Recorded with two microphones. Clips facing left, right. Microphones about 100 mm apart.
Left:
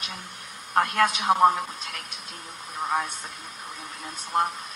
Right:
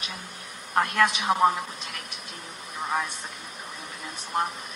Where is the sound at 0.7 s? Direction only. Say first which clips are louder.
Left 1 dB; 40° left (ahead or behind).